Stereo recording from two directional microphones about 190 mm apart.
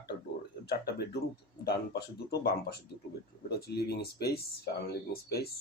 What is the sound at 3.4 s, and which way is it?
Speech, 55° left (ahead or behind).